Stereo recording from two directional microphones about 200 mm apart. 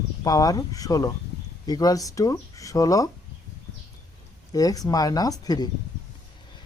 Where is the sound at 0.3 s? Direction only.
20° left (ahead or behind).